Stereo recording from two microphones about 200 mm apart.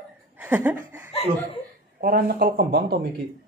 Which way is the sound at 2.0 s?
50° right (ahead or behind).